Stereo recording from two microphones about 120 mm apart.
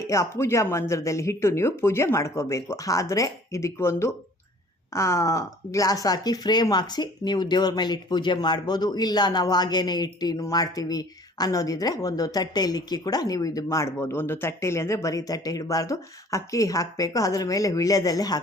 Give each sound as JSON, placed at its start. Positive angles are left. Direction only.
{"t": 0.0, "sound": "speech", "side_deg": 25}